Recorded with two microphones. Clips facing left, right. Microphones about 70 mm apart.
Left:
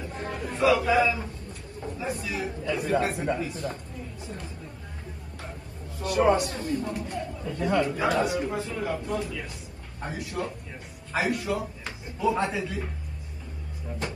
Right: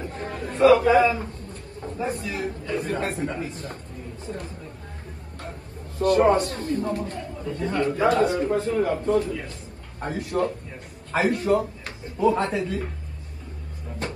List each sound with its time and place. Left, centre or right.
0.2 s a sound: right
2.0 s a man's voice: right
5.9 s a man's voice: right
12.4 s a man's voice: centre